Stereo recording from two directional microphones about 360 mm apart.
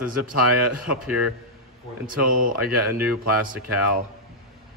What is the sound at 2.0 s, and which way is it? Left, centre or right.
Speech, right.